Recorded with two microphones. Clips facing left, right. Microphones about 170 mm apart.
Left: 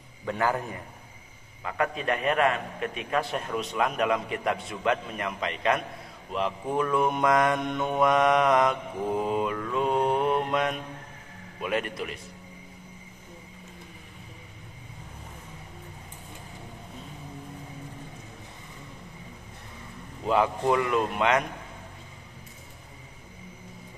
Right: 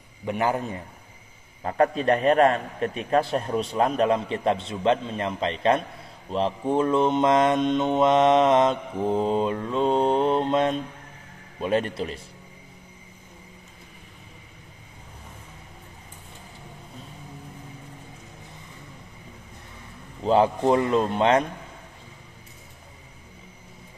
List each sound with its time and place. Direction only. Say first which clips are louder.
0.2 s mantra: right 2 dB; 20° right (ahead or behind)
1.6 s a man's voice: right 7 dB; 40° right (ahead or behind)
6.3 s mantra: right 5 dB; 30° right (ahead or behind)
11.6 s a man's voice: right 5 dB; 30° right (ahead or behind)
20.2 s mantra: right 4 dB; 30° right (ahead or behind)